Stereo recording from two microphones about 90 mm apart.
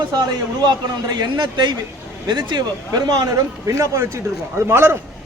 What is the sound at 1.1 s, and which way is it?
A man's voice, 55° right (ahead or behind).